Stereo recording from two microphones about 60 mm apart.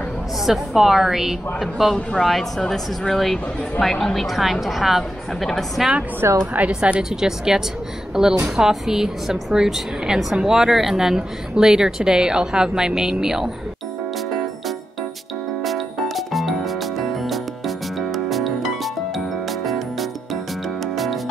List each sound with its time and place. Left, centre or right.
0.5 s a woman's voice: centre
6.4 s a woman's voice: right
6.7 s a woman's voice: centre
15.6 s music: centre